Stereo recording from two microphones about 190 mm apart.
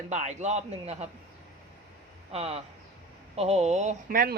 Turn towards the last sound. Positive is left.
turn(degrees=-50)  # may be behind; listen again after turning